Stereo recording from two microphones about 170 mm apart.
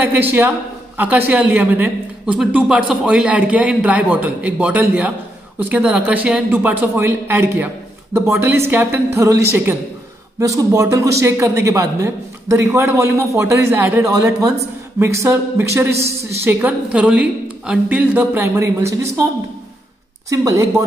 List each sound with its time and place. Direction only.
0.0 s a man's voice: 10° right (ahead or behind)
20.2 s a man's voice: 15° right (ahead or behind)